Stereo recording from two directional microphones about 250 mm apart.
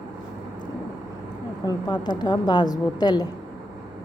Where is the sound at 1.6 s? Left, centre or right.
Centre.